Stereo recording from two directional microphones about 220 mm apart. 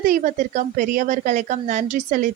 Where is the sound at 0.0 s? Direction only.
35° right (ahead or behind).